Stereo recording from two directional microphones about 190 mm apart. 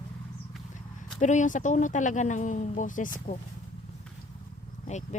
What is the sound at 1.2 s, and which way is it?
Speech, 40° left (ahead or behind).